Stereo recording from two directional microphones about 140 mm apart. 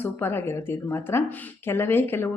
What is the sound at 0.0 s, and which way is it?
Speech, 15° left (ahead or behind).